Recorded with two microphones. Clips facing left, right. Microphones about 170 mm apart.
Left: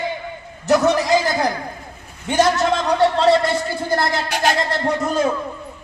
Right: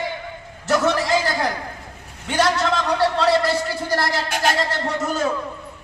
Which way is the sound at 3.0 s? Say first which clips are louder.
Left 4 dB; 25° left (ahead or behind).